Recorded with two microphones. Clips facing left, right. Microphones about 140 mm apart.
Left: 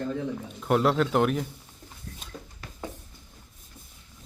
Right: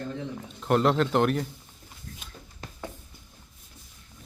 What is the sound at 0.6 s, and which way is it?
Speech, 5° left (ahead or behind).